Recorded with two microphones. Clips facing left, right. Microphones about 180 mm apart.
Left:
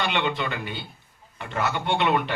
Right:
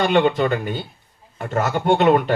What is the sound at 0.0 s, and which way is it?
Speech, 45° right (ahead or behind).